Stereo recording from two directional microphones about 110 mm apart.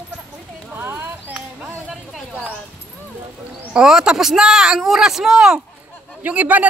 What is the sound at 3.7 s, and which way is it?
Speech, 5° right (ahead or behind).